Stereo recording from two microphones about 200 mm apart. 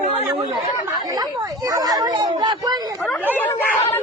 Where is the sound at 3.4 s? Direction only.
10° left (ahead or behind).